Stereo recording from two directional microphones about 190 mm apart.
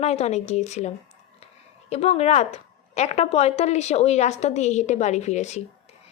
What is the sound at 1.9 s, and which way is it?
A woman's voice, 35° left (ahead or behind).